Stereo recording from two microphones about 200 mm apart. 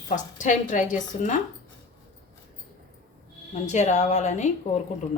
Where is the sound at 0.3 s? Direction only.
40° left (ahead or behind).